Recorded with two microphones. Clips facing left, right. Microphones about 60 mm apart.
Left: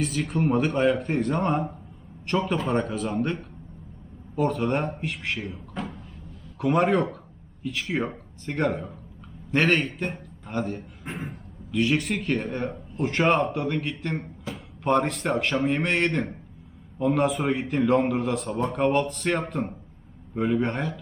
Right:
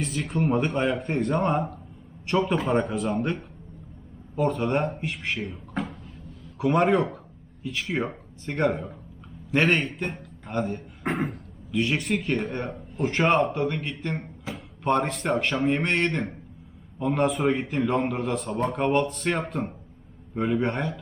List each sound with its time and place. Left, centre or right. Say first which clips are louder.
0.0 s a man's voice: left 1 dB; centre
11.0 s a sound: right 11 dB; right
11.7 s a man's voice: left 1 dB; centre